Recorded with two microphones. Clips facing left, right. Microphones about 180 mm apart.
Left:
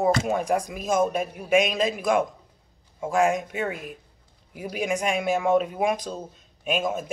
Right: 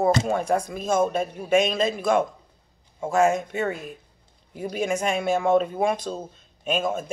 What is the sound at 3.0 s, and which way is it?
Speech, centre (ahead or behind).